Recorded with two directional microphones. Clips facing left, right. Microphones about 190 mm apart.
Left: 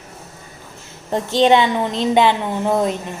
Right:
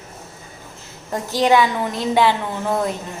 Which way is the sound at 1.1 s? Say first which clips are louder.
Left 3 dB; 25° left (ahead or behind).